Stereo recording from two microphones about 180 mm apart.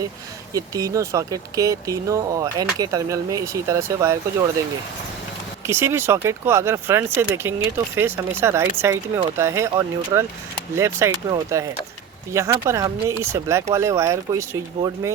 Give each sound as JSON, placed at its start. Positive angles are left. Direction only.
{"t": 0.5, "sound": "speech", "side_deg": -20}
{"t": 5.6, "sound": "speech", "side_deg": -15}